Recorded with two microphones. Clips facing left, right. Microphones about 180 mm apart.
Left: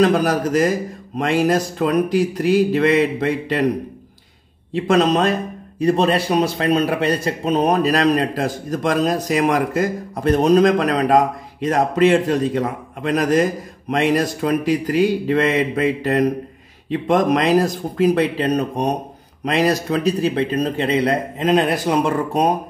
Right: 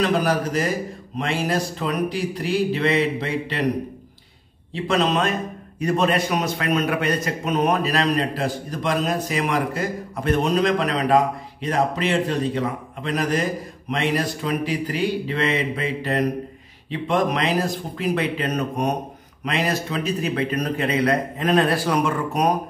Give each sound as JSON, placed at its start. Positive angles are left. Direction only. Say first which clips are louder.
{"t": 0.0, "sound": "a man's voice", "louder": "left 5 dB", "side_deg": 45}
{"t": 4.8, "sound": "a man's voice", "louder": "left 5 dB", "side_deg": 45}
{"t": 22.0, "sound": "speech", "louder": "left 3 dB", "side_deg": 30}